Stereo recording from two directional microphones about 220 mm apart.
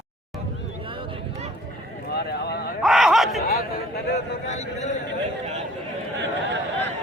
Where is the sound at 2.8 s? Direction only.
Centre (ahead or behind).